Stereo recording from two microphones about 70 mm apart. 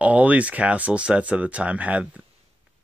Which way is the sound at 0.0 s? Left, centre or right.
Right.